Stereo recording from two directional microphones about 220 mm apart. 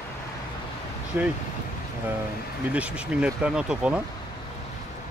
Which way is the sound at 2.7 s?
5° right (ahead or behind).